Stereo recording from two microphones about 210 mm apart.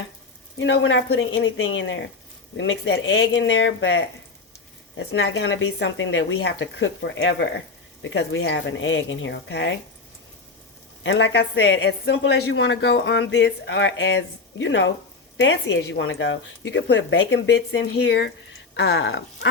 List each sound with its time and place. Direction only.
0.6 s a woman's voice: 60° left (ahead or behind)
11.0 s a woman's voice: 60° left (ahead or behind)